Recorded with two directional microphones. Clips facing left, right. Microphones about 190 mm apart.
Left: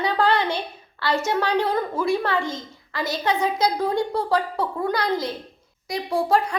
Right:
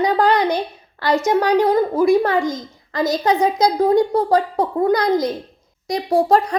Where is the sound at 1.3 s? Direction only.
40° right (ahead or behind).